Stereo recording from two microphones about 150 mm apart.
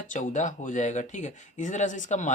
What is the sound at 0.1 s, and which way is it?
Speech, 55° left (ahead or behind).